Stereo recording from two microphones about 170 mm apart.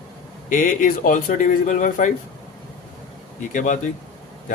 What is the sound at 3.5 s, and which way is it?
Speech, 50° left (ahead or behind).